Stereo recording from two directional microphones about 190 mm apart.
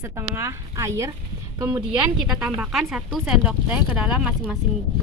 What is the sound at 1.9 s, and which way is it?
Speech, 5° right (ahead or behind).